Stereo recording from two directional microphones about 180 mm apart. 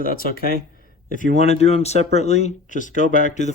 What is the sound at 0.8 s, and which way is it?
Speech, 45° left (ahead or behind).